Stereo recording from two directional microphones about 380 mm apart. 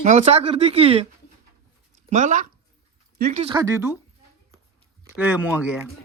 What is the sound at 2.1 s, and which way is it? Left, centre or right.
A child's voice, centre.